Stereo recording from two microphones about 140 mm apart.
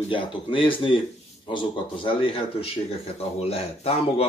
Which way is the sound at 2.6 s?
45° left (ahead or behind).